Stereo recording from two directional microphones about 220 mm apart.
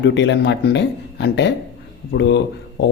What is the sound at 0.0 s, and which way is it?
Speech, 55° left (ahead or behind).